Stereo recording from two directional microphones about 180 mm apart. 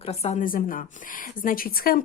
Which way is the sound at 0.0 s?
35° left (ahead or behind).